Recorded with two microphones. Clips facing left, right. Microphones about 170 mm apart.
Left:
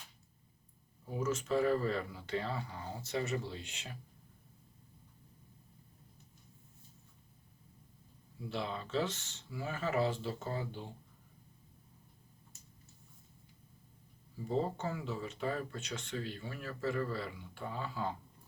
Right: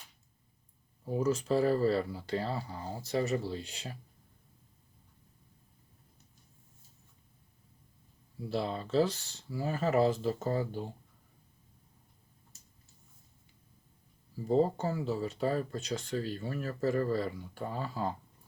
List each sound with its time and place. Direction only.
1.0 s speech: 35° right (ahead or behind)
8.4 s speech: 35° right (ahead or behind)
14.4 s speech: 35° right (ahead or behind)